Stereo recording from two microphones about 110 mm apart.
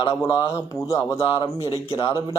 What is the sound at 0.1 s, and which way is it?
Speech, 30° left (ahead or behind).